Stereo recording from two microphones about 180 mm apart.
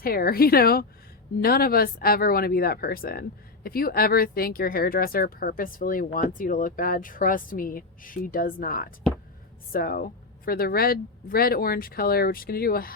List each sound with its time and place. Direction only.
0.0 s speech: 55° left (ahead or behind)